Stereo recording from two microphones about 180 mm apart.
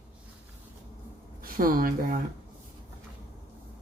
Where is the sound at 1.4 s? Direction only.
50° right (ahead or behind).